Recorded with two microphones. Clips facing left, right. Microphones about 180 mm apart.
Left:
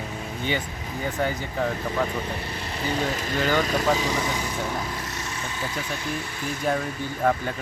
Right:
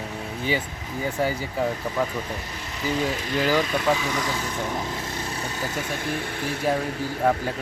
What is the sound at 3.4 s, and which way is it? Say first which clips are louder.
Speech: right 1 dB; 5° right (ahead or behind).